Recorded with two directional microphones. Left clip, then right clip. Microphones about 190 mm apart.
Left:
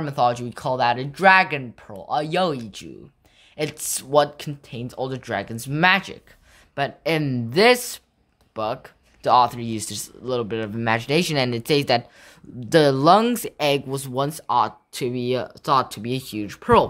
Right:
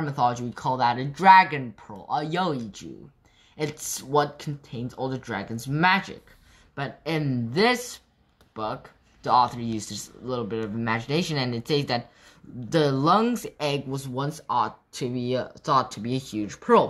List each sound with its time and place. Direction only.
0.0 s speech: 50° left (ahead or behind)